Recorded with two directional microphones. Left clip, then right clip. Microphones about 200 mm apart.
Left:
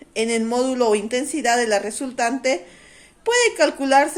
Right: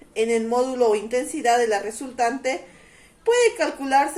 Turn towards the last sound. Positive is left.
turn(degrees=45)  # may be behind; listen again after turning